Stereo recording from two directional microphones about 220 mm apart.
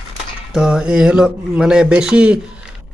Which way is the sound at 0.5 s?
5° right (ahead or behind).